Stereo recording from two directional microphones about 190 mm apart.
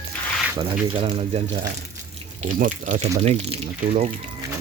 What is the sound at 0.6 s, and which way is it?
Speech, 30° right (ahead or behind).